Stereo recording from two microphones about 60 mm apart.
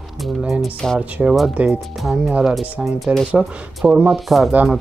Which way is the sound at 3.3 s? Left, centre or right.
Centre.